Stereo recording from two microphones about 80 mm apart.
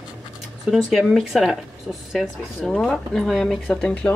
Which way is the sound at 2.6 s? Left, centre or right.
Centre.